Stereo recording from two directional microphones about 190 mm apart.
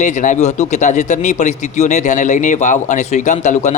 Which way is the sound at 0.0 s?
40° left (ahead or behind).